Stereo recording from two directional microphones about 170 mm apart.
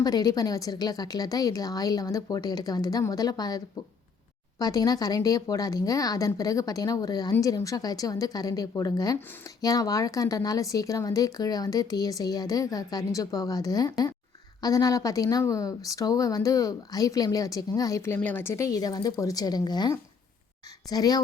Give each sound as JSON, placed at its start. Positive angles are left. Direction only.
{"t": 0.0, "sound": "speech", "side_deg": 20}